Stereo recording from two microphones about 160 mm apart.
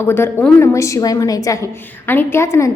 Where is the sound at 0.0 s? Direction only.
15° left (ahead or behind).